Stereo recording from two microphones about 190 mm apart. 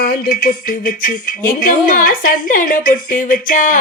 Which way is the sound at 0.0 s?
45° left (ahead or behind).